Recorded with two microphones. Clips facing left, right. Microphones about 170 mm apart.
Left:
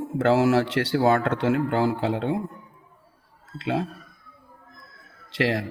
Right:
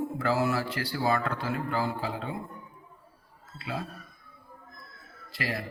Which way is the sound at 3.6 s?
90° left.